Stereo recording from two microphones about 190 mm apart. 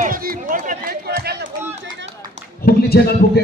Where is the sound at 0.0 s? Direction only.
50° right (ahead or behind); by 2.0 s 65° right (ahead or behind).